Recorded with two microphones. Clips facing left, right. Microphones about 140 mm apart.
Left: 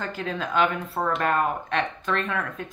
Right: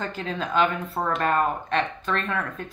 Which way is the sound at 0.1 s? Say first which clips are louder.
Right 1 dB; 5° left (ahead or behind).